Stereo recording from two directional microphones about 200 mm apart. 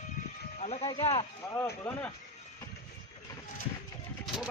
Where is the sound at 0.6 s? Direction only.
30° left (ahead or behind).